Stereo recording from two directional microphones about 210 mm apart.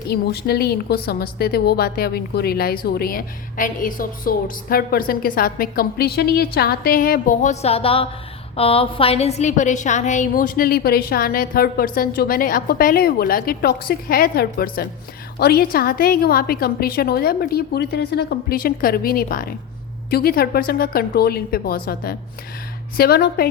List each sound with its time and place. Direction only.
0.1 s a woman's voice: 50° left (ahead or behind)